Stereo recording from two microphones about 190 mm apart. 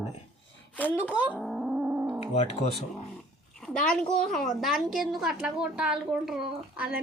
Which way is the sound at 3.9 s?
5° left (ahead or behind).